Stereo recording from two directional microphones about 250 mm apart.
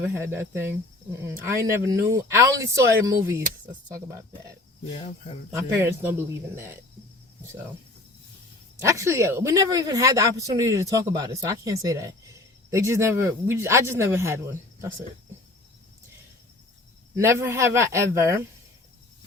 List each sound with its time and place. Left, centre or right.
0.0 s speech: centre
4.9 s speech: left
5.5 s speech: centre
8.8 s speech: centre
17.2 s speech: centre